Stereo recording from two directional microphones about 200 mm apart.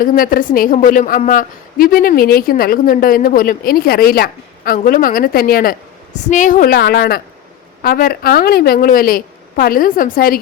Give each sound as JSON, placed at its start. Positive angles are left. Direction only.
{"t": 0.0, "sound": "a woman's voice", "side_deg": 45}